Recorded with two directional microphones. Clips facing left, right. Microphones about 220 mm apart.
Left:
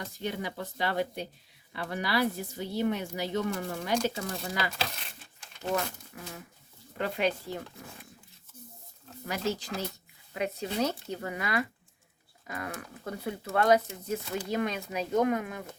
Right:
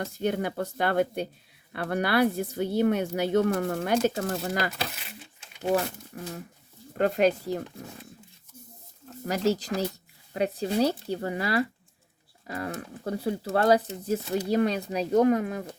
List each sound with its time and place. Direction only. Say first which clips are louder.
0.0 s speech: right 7 dB; 50° right (ahead or behind)
4.9 s speech: right 1 dB; 5° right (ahead or behind)
6.1 s speech: right 6 dB; 35° right (ahead or behind)
9.2 s speech: right 7 dB; 40° right (ahead or behind)